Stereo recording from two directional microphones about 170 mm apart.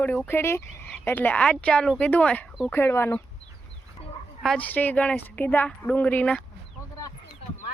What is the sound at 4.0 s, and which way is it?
Dog, 35° left (ahead or behind).